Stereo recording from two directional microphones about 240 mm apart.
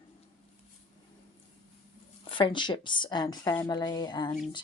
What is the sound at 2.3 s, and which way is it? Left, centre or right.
Speech, centre.